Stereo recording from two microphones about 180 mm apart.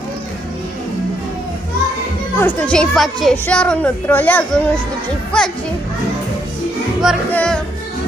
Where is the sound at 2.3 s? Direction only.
10° left (ahead or behind).